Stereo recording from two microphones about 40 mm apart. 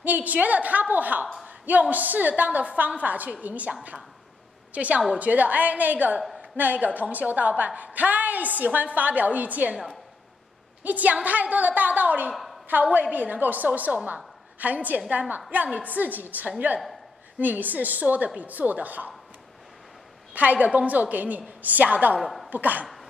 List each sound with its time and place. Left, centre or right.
0.0 s a woman's voice: right
4.7 s a woman's voice: right
10.8 s a woman's voice: right
12.3 s a sound: centre
12.6 s a woman's voice: right
16.4 s a woman's voice: right
17.4 s a woman's voice: right
20.3 s a woman's voice: right
22.2 s a woman's voice: centre
22.5 s a woman's voice: right